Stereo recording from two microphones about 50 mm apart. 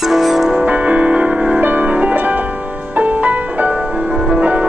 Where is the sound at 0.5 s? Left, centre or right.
Right.